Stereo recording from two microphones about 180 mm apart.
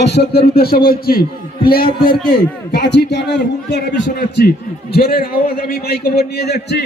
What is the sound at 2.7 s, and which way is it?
A man's voice, 70° left (ahead or behind).